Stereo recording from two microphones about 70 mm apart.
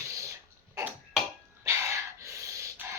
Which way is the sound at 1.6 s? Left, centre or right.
Right.